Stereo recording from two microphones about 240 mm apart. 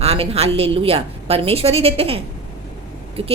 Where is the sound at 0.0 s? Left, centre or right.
Right.